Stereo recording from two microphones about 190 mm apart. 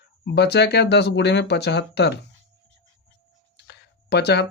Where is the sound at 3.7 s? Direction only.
60° left (ahead or behind).